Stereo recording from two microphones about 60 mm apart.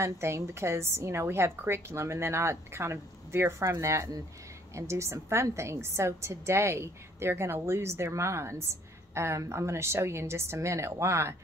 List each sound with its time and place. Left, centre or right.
0.0 s a woman's voice: right